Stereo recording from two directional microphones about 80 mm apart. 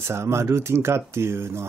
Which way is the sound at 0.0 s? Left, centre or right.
Right.